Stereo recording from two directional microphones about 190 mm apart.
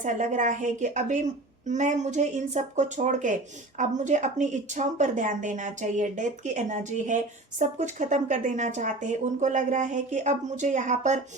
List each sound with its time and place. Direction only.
0.0 s speech: 40° right (ahead or behind)